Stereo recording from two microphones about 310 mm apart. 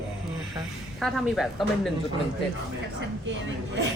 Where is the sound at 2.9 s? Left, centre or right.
Right.